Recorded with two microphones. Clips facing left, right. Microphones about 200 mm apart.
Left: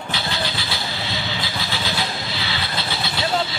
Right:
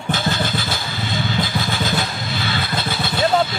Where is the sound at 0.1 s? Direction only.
50° right (ahead or behind).